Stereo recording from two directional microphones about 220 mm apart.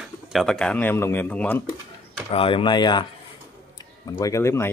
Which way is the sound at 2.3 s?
25° left (ahead or behind).